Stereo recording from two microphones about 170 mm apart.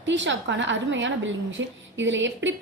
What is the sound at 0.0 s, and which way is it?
A woman's voice, 90° right.